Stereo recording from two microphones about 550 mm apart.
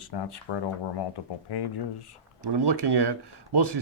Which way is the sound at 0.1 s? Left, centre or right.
Left.